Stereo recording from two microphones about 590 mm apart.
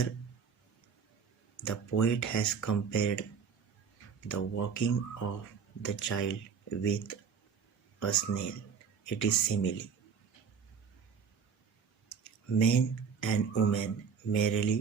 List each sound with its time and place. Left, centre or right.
1.6 s speech: left
4.3 s speech: left
12.2 s speech: left